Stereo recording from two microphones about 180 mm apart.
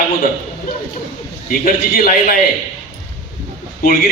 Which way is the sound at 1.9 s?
55° left (ahead or behind).